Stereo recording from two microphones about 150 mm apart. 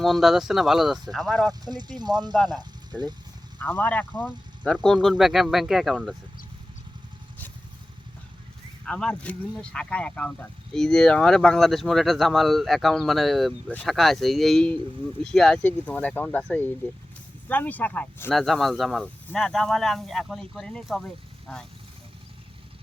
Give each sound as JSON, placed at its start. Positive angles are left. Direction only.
{"t": 0.0, "sound": "speech", "side_deg": 0}
{"t": 1.5, "sound": "speech", "side_deg": -25}
{"t": 3.6, "sound": "speech", "side_deg": 10}
{"t": 8.9, "sound": "speech", "side_deg": 5}